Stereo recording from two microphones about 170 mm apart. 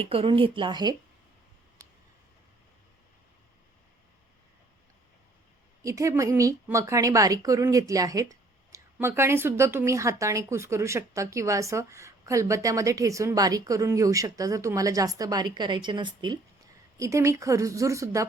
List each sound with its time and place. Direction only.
0.0 s a woman's voice: 35° right (ahead or behind)
5.8 s a woman's voice: 20° right (ahead or behind)